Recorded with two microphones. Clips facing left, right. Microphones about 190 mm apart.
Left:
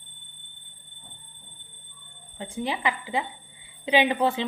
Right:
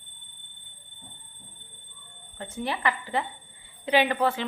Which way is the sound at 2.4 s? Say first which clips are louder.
Left 1 dB; 15° left (ahead or behind).